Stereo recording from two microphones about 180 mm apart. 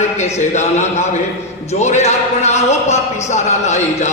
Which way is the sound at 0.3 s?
40° left (ahead or behind).